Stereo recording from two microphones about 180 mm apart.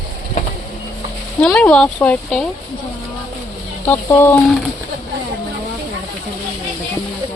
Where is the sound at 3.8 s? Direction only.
15° left (ahead or behind).